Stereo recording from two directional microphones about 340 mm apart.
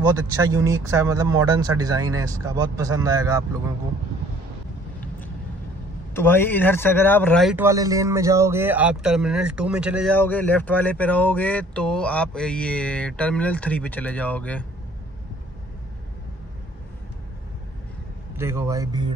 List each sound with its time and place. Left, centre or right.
0.1 s speech: centre
6.1 s speech: centre
18.3 s speech: centre